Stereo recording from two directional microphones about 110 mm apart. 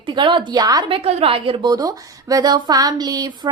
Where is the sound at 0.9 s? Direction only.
65° right (ahead or behind).